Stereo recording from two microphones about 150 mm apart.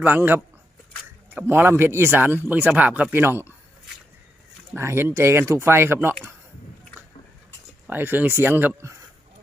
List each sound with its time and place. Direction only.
0.0 s speech: 10° right (ahead or behind)
4.7 s speech: 15° right (ahead or behind)
7.9 s speech: 15° right (ahead or behind)